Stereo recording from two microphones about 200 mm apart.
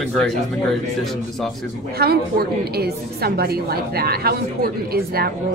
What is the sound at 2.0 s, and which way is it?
A woman's voice, 50° right (ahead or behind).